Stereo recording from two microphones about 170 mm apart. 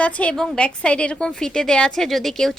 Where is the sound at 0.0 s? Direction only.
10° left (ahead or behind).